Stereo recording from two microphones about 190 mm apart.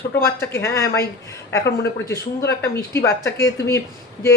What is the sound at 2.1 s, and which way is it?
Speech, 15° left (ahead or behind).